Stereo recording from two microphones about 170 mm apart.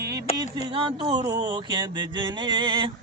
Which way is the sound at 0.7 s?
30° right (ahead or behind).